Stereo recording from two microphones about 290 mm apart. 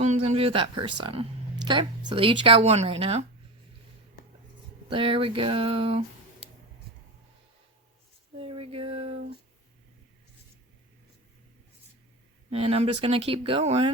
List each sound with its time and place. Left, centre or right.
0.0 s speech: right
4.9 s speech: centre
8.4 s a sound: centre
12.5 s speech: centre